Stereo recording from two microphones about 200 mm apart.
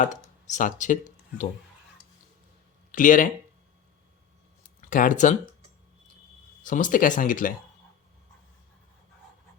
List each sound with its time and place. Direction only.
0.0 s speech: 40° left (ahead or behind)
2.9 s speech: 40° left (ahead or behind)
4.8 s speech: 40° left (ahead or behind)
6.6 s speech: 40° left (ahead or behind)